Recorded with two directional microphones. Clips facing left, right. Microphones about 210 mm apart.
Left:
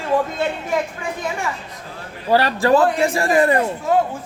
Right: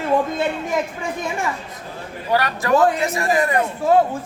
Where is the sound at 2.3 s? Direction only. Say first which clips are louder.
Left 3 dB; 30° left (ahead or behind).